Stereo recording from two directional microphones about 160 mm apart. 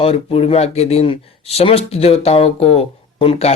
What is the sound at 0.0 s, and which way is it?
Speech, 40° left (ahead or behind).